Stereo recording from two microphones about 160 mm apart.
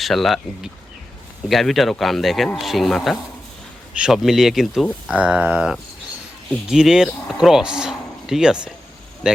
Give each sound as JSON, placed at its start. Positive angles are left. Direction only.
{"t": 0.0, "sound": "speech", "side_deg": 0}